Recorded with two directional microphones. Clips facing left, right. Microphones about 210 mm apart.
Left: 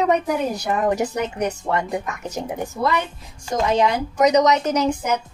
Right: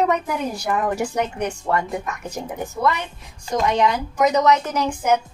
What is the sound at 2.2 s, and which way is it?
A woman's voice, 25° left (ahead or behind).